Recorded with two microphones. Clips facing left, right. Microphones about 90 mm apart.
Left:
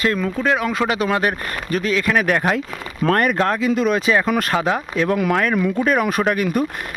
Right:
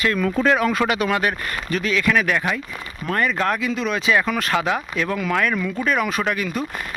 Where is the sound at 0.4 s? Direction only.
15° left (ahead or behind); by 2.6 s 45° left (ahead or behind).